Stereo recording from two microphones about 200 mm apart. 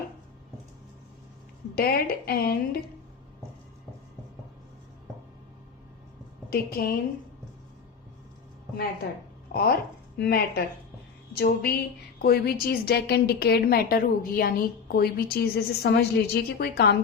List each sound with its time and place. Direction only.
1.7 s a woman's voice: 50° left (ahead or behind)
6.5 s a woman's voice: 50° left (ahead or behind)
9.5 s a woman's voice: 50° left (ahead or behind)